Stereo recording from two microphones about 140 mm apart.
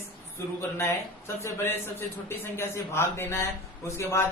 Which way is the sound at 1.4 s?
20° left (ahead or behind).